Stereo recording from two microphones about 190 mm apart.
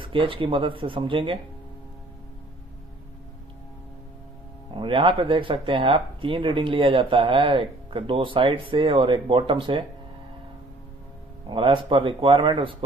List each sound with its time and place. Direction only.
0.0 s speech: 25° right (ahead or behind)
4.7 s speech: 25° right (ahead or behind)
11.4 s speech: 25° right (ahead or behind)